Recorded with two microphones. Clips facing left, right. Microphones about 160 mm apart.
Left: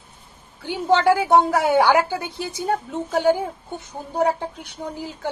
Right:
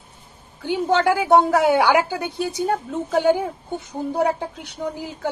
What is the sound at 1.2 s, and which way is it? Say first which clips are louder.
A woman's voice: right 2 dB; 15° right (ahead or behind).